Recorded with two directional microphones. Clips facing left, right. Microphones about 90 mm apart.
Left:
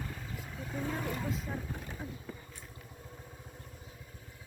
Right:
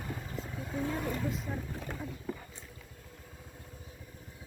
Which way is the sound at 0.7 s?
Centre (ahead or behind).